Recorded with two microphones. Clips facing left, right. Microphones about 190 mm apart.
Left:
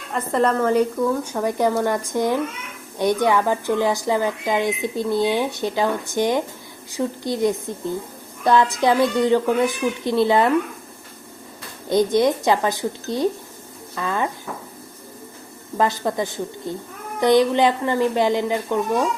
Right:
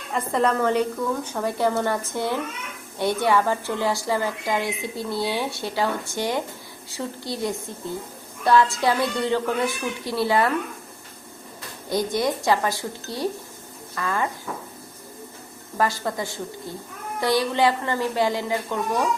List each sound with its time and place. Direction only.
0.1 s speech: centre (ahead or behind); by 10.5 s 20° left (ahead or behind)
11.9 s speech: 20° left (ahead or behind)
15.8 s speech: 20° left (ahead or behind)